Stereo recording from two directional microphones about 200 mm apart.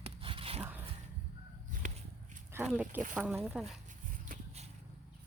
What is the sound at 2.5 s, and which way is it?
Speech, 5° right (ahead or behind).